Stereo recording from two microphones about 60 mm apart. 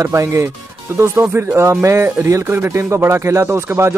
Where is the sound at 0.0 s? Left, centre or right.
Right.